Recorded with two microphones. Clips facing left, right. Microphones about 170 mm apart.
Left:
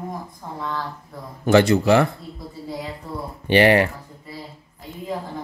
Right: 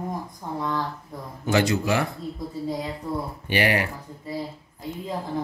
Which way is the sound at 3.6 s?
60° left (ahead or behind).